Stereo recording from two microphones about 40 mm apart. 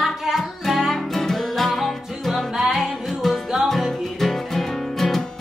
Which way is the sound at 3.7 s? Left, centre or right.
Centre.